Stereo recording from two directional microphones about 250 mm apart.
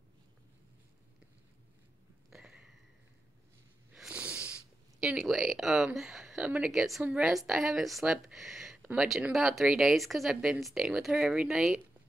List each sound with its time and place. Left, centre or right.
2.3 s a sound: centre
3.9 s wheeze: centre
5.0 s a woman's voice: centre